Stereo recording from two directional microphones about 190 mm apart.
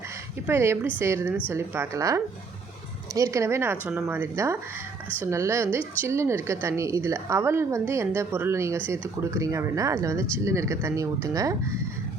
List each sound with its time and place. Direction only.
0.4 s a woman's voice: 15° right (ahead or behind)